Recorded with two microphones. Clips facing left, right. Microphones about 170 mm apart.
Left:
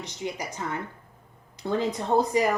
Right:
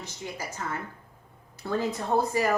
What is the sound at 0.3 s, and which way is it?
A woman's voice, 15° left (ahead or behind).